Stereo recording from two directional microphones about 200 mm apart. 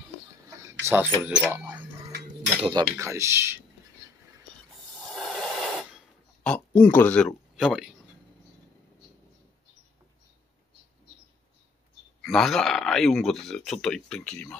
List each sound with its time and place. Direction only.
0.6 s a sound: 15° right (ahead or behind)
2.5 s speech: 25° right (ahead or behind)
3.0 s speech: 15° right (ahead or behind)
4.9 s snort: centre (ahead or behind)
12.2 s speech: centre (ahead or behind)